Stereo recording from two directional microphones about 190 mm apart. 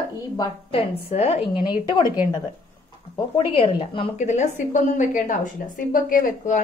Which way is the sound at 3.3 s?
30° left (ahead or behind).